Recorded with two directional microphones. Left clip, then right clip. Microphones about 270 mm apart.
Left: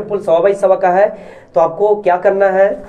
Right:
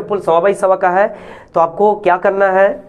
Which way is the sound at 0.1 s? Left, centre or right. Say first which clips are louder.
Even; right.